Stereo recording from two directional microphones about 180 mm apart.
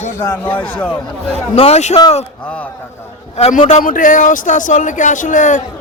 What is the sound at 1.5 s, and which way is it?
Speech, 35° left (ahead or behind).